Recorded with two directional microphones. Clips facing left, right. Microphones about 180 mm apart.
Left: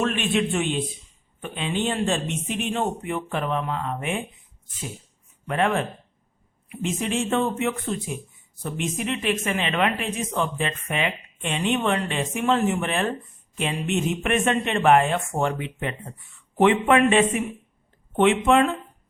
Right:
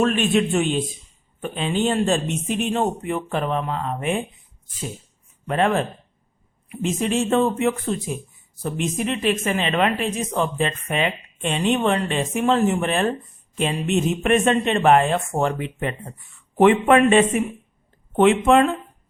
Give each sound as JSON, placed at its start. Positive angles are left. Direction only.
{"t": 0.0, "sound": "speech", "side_deg": -40}
{"t": 5.5, "sound": "speech", "side_deg": -30}